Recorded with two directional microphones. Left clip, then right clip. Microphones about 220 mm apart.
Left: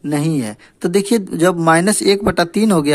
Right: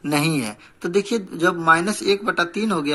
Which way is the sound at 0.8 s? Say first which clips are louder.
Left 6 dB; 45° left (ahead or behind).